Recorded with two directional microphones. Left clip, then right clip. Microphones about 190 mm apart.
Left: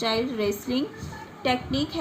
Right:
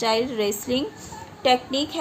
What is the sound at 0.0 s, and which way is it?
A woman's voice, 45° right (ahead or behind).